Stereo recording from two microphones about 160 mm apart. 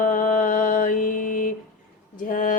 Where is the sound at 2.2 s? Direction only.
60° left (ahead or behind).